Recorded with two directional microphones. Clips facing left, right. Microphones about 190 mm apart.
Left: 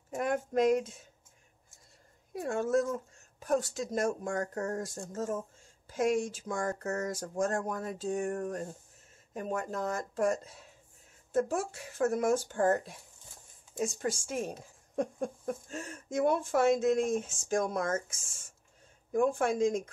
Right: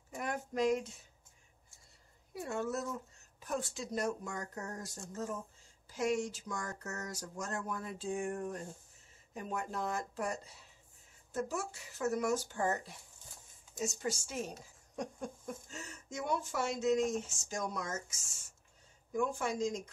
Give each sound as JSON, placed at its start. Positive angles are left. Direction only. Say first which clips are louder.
{"t": 0.1, "sound": "speech", "louder": "left 8 dB", "side_deg": 50}
{"t": 2.4, "sound": "speech", "louder": "left 8 dB", "side_deg": 50}